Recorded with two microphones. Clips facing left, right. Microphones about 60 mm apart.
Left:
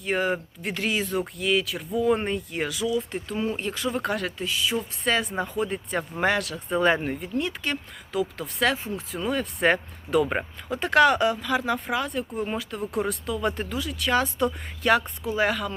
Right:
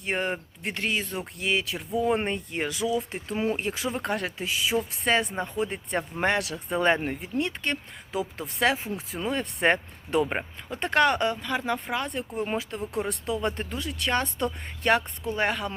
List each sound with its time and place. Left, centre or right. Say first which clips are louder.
0.1 s speech: left 3 dB; centre
2.2 s speech: left 1 dB; centre
3.3 s speech: right 1 dB; right
3.9 s speech: left 2 dB; centre
4.4 s speech: even; centre
4.8 s speech: right 1 dB; centre
8.1 s speech: left 3 dB; centre
9.3 s speech: left 1 dB; centre
10.7 s speech: left 4 dB; centre